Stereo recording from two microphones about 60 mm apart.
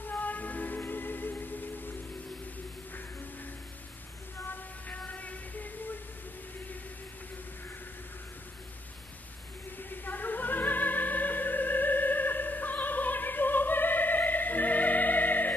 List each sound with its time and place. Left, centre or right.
0.0 s music: left
4.8 s music: left
9.8 s opera: left